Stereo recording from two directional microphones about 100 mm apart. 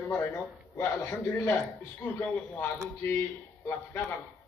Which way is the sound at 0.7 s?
25° left (ahead or behind).